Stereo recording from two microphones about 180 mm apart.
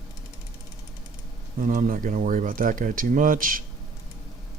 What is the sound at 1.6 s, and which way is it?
Speech, 50° right (ahead or behind).